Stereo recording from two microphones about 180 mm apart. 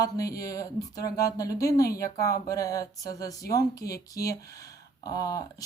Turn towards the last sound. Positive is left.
turn(degrees=20)  # may be behind; listen again after turning